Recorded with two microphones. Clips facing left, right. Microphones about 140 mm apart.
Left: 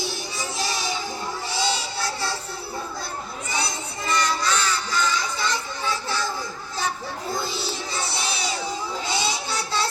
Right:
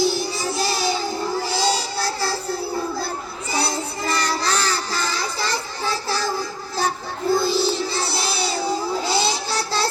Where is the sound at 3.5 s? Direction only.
35° right (ahead or behind).